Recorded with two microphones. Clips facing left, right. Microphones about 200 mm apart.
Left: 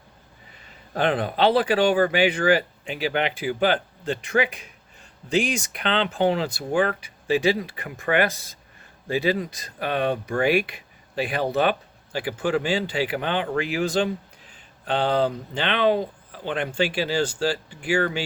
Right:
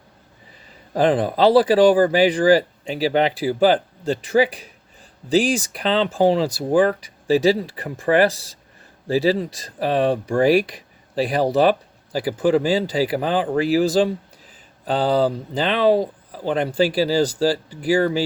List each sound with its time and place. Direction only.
0.9 s speech: 35° right (ahead or behind)